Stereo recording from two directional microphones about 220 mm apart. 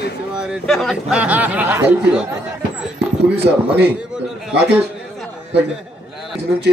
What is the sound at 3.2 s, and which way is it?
Speech, 50° right (ahead or behind).